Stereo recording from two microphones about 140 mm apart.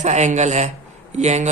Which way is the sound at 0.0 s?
55° right (ahead or behind).